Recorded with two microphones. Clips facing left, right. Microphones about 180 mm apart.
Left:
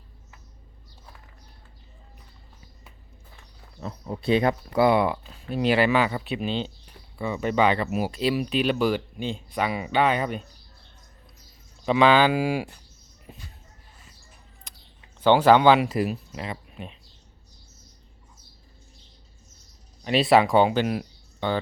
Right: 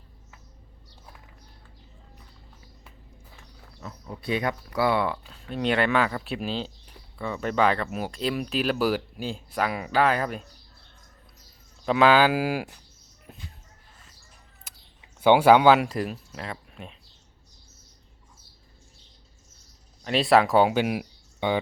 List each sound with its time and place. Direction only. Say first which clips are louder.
3.8 s speech: left 6 dB; 30° left (ahead or behind)
5.2 s speech: left 3 dB; 5° left (ahead or behind)
11.9 s speech: left 1 dB; 5° right (ahead or behind)
14.7 s a sound: even; 5° right (ahead or behind)
15.2 s speech: even; 10° right (ahead or behind)
20.1 s speech: left 1 dB; centre (ahead or behind)